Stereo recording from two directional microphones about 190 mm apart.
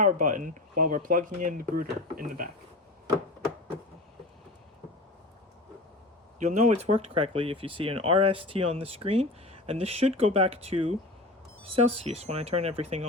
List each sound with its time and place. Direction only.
0.0 s speech: 45° right (ahead or behind)
6.4 s speech: 40° right (ahead or behind)